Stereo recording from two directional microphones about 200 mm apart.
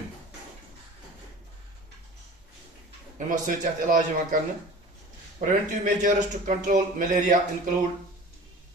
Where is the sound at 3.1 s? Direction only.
40° right (ahead or behind).